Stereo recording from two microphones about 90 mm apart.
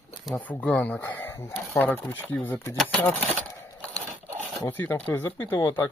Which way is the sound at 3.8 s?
15° left (ahead or behind).